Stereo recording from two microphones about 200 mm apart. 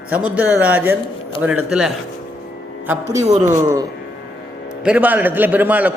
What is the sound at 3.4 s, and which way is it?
A man's voice, 15° right (ahead or behind).